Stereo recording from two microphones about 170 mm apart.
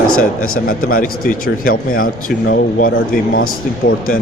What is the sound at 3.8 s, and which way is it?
Speech, 45° left (ahead or behind).